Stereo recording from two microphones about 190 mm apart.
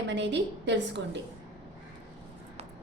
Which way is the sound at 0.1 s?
65° right (ahead or behind).